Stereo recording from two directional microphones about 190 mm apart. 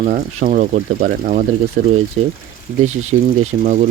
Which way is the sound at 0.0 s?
45° right (ahead or behind).